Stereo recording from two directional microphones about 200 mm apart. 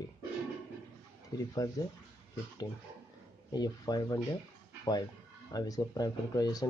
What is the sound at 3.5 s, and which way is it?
Speech, 20° left (ahead or behind).